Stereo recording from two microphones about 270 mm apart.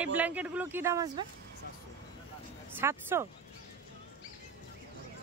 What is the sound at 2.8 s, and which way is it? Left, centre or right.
Speech, centre.